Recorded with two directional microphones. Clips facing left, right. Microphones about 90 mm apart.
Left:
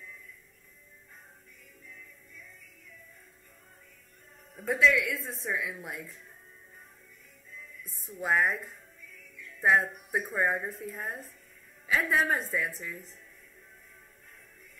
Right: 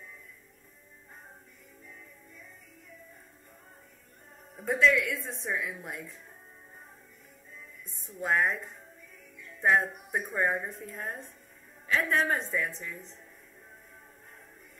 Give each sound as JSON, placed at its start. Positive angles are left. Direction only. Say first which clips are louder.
{"t": 1.9, "sound": "music", "louder": "even", "side_deg": -30}
{"t": 4.6, "sound": "speech", "louder": "even", "side_deg": 0}
{"t": 7.9, "sound": "speech", "louder": "even", "side_deg": 5}
{"t": 9.1, "sound": "music", "louder": "left 2 dB", "side_deg": -30}
{"t": 9.6, "sound": "speech", "louder": "even", "side_deg": 0}